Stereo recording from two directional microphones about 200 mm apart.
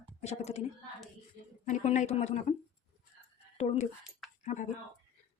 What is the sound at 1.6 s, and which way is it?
Speech, 35° left (ahead or behind).